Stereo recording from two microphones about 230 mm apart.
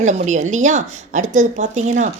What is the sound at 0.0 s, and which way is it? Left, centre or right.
A woman's voice, right.